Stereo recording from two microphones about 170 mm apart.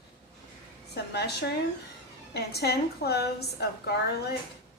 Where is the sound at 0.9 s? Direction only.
75° left (ahead or behind).